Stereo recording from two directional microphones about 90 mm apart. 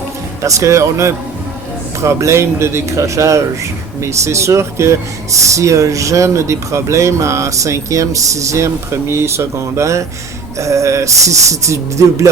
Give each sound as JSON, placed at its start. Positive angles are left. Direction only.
{"t": 0.4, "sound": "speech", "side_deg": -35}